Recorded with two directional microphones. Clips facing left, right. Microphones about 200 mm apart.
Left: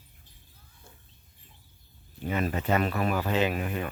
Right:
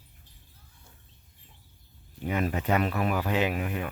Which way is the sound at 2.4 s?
15° right (ahead or behind).